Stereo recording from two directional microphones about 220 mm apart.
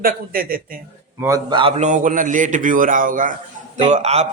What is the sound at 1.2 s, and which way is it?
A man's voice, 15° right (ahead or behind).